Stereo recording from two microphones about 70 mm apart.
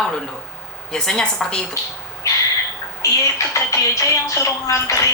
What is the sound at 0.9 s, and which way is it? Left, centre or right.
Speech, centre.